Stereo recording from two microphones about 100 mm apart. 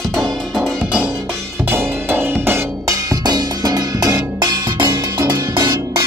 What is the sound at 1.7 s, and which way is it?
Music, 20° right (ahead or behind).